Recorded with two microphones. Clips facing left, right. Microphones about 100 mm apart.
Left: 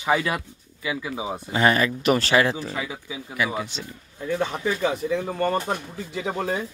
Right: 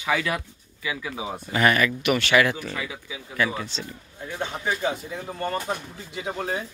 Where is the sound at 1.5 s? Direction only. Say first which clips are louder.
Left 1 dB; 25° left (ahead or behind).